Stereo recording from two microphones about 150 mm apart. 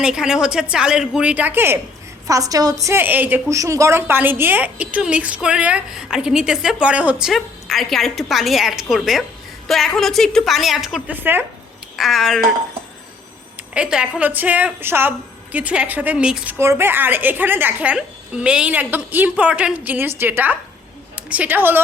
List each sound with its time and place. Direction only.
0.0 s a woman's voice: 5° right (ahead or behind)
11.9 s a woman's voice: centre (ahead or behind)
13.7 s speech: 5° right (ahead or behind)
16.6 s a woman's voice: 15° right (ahead or behind)